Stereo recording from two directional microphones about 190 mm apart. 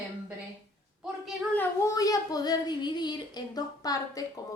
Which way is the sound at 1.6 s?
15° left (ahead or behind).